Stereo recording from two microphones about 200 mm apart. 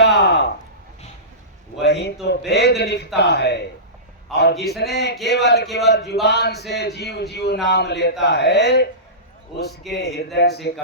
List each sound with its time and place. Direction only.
0.0 s a sound: 55° left (ahead or behind)
1.8 s speech: 55° left (ahead or behind)
4.3 s a man's voice: centre (ahead or behind)
4.8 s speech: 55° left (ahead or behind)
9.9 s speech: 55° left (ahead or behind)